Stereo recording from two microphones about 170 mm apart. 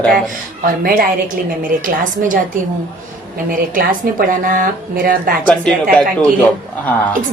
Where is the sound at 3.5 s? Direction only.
55° right (ahead or behind).